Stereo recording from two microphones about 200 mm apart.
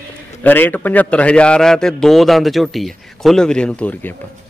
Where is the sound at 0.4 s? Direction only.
10° left (ahead or behind).